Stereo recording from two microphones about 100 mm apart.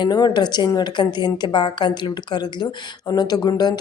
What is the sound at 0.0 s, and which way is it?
Speech, 45° left (ahead or behind).